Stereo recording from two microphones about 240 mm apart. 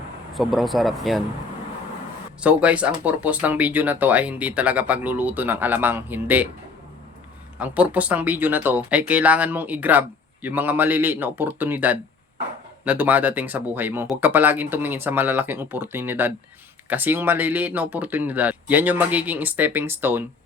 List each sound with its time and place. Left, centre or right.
0.3 s speech: centre
2.4 s speech: centre
7.6 s speech: centre